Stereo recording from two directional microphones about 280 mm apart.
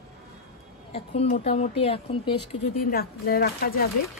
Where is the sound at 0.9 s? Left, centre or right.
Left.